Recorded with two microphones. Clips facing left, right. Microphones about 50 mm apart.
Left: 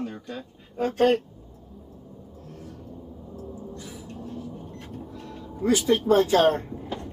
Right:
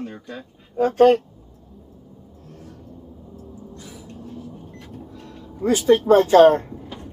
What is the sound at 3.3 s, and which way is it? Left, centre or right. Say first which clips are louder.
Vehicle: left 3 dB; centre.